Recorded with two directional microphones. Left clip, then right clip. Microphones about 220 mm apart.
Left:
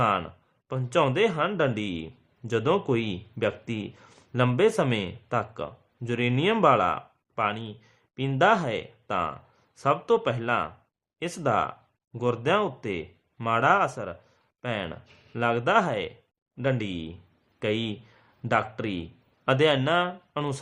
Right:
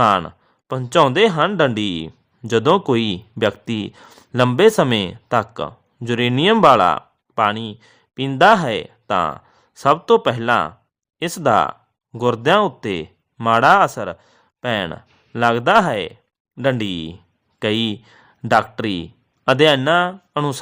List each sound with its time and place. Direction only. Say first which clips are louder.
0.0 s a man's voice: right 10 dB; 45° right (ahead or behind)